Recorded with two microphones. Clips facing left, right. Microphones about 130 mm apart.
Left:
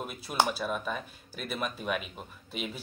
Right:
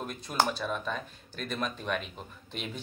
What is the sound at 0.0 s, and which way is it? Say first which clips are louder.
Speech: even; 5° left (ahead or behind).